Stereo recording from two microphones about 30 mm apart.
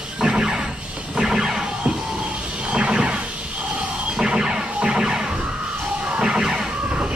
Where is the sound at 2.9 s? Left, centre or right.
Right.